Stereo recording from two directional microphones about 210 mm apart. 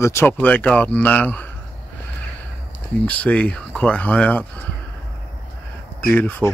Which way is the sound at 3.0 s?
5° left (ahead or behind).